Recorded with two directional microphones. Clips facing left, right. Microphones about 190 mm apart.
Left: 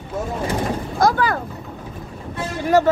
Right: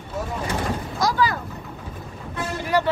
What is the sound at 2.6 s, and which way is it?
Speech, 45° left (ahead or behind).